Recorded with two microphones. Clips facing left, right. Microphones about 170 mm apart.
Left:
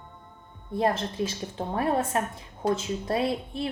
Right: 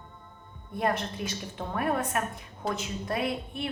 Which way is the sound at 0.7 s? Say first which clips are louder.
Left 4 dB; 30° left (ahead or behind).